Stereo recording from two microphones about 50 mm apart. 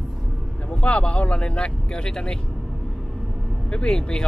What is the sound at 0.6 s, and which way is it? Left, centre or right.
Speech, left.